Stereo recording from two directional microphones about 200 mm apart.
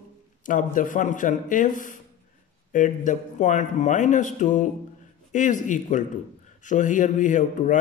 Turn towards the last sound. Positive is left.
turn(degrees=40)  # may be behind; listen again after turning